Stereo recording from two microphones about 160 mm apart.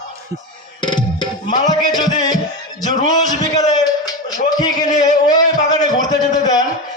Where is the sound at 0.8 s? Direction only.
30° left (ahead or behind).